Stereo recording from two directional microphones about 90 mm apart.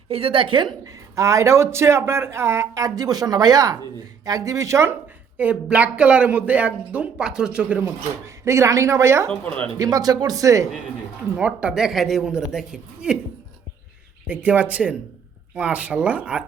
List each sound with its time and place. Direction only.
0.1 s a woman's voice: 90° right; by 0.7 s 70° right (ahead or behind)
0.9 s speech: 35° right (ahead or behind)
5.4 s speech: 15° right (ahead or behind)
7.9 s speech: 35° right (ahead or behind)
9.7 s speech: 40° right (ahead or behind)
11.3 s speech: 10° right (ahead or behind)
14.3 s speech: 15° right (ahead or behind)